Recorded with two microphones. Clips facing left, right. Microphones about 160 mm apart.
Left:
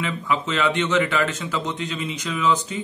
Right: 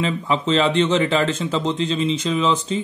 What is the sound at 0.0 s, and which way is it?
A man's voice, 30° right (ahead or behind).